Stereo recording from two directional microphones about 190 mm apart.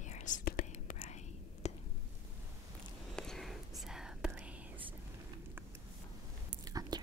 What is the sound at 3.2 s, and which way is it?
Whispering, centre (ahead or behind).